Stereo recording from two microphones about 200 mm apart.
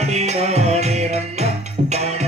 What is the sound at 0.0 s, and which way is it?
Music, 35° right (ahead or behind).